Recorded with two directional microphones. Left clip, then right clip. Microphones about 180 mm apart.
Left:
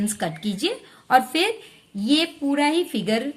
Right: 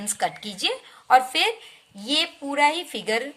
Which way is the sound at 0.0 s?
15° right (ahead or behind).